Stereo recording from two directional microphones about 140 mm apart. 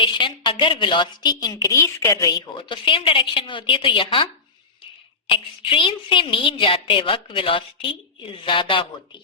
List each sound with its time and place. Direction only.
0.0 s a woman's voice: 35° left (ahead or behind)
5.3 s a woman's voice: 40° left (ahead or behind)